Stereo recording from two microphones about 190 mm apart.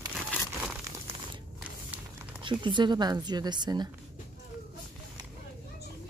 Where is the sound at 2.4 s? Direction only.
25° right (ahead or behind).